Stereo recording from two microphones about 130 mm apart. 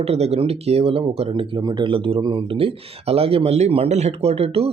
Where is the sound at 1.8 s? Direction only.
45° right (ahead or behind).